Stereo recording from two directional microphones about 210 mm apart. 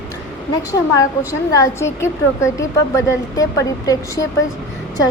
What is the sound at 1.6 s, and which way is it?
Speech, 15° left (ahead or behind).